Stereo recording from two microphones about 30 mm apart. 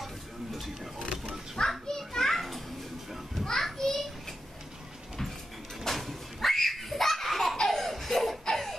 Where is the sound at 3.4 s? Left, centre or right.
Centre.